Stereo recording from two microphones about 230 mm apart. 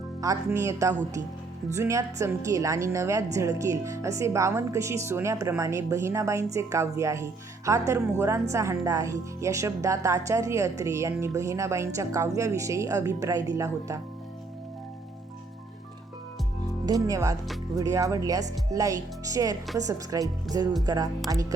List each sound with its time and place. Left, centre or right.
0.2 s speech: centre
16.8 s speech: centre